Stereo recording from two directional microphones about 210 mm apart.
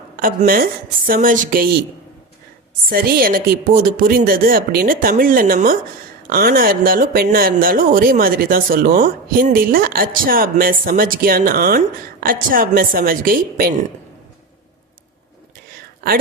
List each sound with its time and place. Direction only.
0.2 s speech: 40° right (ahead or behind)
2.9 s speech: 45° right (ahead or behind)